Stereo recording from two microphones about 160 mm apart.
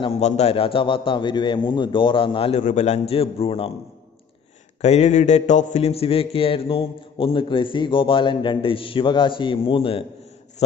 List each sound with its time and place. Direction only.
0.0 s a man's voice: 40° left (ahead or behind)
2.6 s a man's voice: 45° left (ahead or behind)
4.8 s a man's voice: 45° left (ahead or behind)